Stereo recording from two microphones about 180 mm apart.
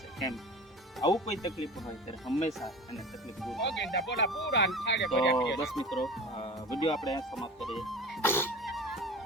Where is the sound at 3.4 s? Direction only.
Centre (ahead or behind).